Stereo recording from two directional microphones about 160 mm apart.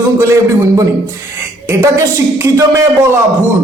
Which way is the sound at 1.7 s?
20° right (ahead or behind).